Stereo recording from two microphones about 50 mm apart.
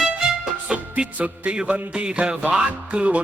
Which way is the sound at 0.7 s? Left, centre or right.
Right.